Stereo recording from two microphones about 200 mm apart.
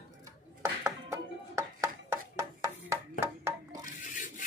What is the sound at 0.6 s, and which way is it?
Chopping, 15° right (ahead or behind).